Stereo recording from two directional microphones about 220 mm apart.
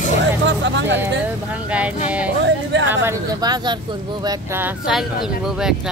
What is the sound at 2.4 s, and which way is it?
Music, 55° right (ahead or behind).